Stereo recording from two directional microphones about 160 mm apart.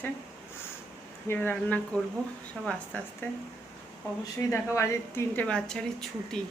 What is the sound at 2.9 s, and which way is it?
Speech, 10° left (ahead or behind).